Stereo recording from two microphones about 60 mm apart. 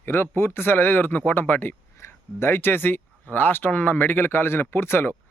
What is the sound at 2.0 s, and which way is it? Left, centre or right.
Speech, left.